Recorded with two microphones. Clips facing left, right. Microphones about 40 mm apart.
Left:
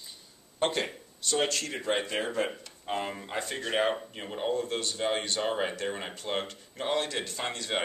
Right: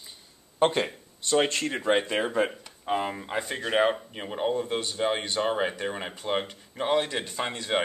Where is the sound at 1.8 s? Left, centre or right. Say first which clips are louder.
Right 6 dB; centre.